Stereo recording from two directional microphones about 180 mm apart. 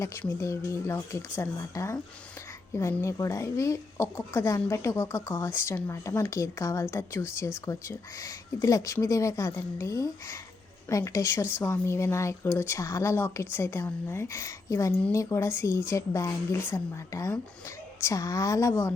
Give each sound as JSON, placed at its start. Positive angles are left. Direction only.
{"t": 0.0, "sound": "speech", "side_deg": 15}